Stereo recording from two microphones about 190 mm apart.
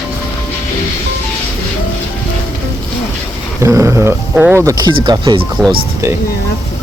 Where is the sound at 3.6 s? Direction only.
15° right (ahead or behind).